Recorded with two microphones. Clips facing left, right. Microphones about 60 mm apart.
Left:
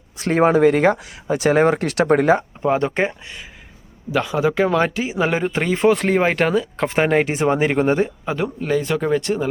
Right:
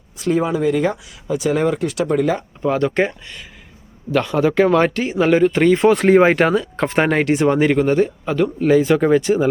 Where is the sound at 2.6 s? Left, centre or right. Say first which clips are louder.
Right 1 dB; left.